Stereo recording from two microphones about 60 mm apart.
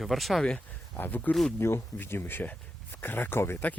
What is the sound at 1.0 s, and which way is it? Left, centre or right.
Speech, left.